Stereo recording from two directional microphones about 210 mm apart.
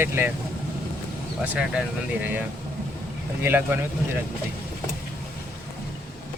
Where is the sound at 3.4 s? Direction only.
10° right (ahead or behind).